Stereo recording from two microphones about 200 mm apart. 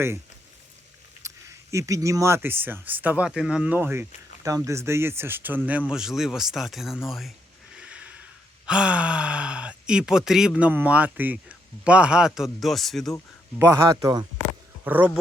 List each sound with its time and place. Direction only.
1.2 s speech: 15° right (ahead or behind)
7.8 s a sound: 5° right (ahead or behind)
8.6 s speech: 5° right (ahead or behind)
13.6 s speech: 15° right (ahead or behind)